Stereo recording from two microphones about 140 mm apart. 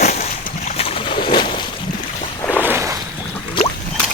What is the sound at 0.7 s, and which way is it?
Boat, 45° left (ahead or behind).